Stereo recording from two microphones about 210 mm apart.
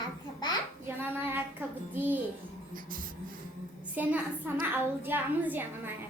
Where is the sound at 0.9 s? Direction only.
10° right (ahead or behind).